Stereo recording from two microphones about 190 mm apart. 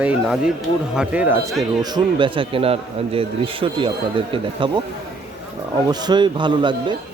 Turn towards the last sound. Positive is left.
turn(degrees=-25)  # may be behind; listen again after turning